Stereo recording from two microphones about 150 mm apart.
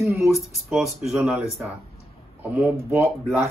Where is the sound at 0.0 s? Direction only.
15° right (ahead or behind).